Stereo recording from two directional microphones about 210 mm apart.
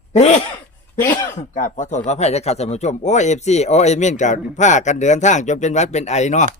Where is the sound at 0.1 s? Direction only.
35° left (ahead or behind).